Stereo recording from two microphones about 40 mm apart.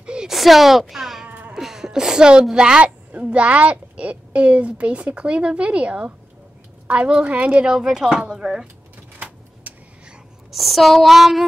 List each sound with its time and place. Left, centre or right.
0.0 s a sound: right
0.3 s a woman's voice: centre; by 2.8 s right
2.8 s a woman's voice: right
7.7 s speech: centre
9.2 s vehicle: right
10.5 s a sound: centre